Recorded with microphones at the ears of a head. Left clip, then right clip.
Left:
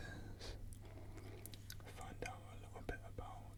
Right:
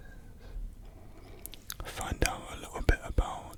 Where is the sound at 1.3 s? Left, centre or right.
Right.